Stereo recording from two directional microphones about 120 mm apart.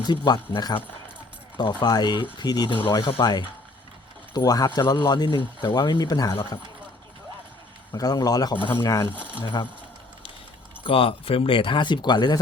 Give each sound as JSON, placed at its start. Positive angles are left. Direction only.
{"t": 0.0, "sound": "speech", "side_deg": 40}
{"t": 7.9, "sound": "speech", "side_deg": 30}
{"t": 10.8, "sound": "speech", "side_deg": 50}